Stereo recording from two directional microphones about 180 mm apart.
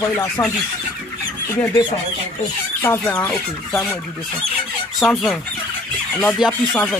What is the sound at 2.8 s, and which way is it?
Speech, 10° left (ahead or behind).